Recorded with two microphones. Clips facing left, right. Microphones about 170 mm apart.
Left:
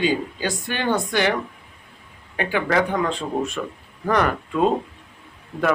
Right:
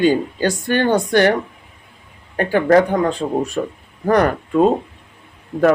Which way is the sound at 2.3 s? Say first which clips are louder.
Right 8 dB; 45° right (ahead or behind).